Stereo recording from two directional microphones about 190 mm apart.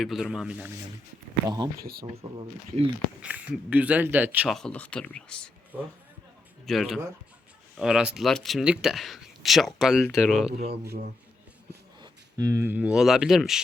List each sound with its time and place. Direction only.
0.0 s speech: centre (ahead or behind)
1.5 s speech: 20° right (ahead or behind)
1.7 s speech: 50° right (ahead or behind)
2.2 s speech: 25° right (ahead or behind)
3.2 s speech: 5° right (ahead or behind)
6.7 s speech: centre (ahead or behind)
10.8 s speech: 50° right (ahead or behind)
11.9 s speech: 20° right (ahead or behind); by 13.6 s centre (ahead or behind)